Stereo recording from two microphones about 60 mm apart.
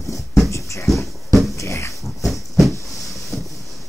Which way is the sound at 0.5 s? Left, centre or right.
Left.